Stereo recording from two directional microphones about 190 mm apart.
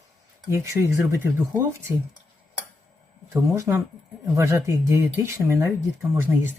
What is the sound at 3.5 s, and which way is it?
Speech, 15° right (ahead or behind).